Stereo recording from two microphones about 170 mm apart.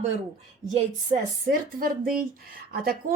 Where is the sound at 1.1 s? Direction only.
45° right (ahead or behind).